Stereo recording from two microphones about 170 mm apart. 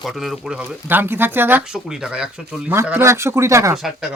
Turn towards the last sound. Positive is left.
turn(degrees=0)  # may be behind; listen again after turning